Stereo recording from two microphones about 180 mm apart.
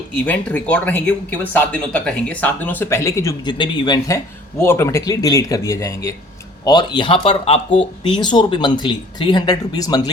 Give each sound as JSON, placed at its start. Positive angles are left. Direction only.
{"t": 0.1, "sound": "speech", "side_deg": 10}